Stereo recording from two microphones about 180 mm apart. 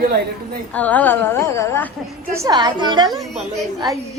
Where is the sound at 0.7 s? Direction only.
10° left (ahead or behind).